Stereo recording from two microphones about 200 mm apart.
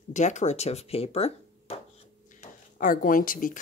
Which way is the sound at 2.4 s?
40° left (ahead or behind).